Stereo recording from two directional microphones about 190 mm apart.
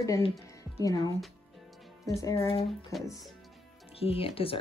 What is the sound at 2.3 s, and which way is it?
Speech, 30° left (ahead or behind).